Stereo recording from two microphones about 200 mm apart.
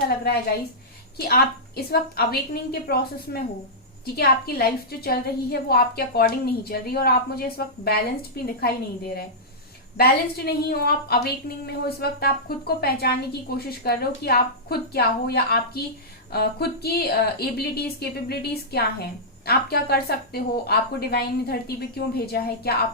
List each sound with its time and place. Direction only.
1.1 s a woman's voice: 50° left (ahead or behind)